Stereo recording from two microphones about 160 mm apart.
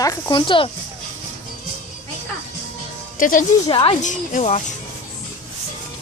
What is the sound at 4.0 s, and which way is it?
Speech, 50° left (ahead or behind).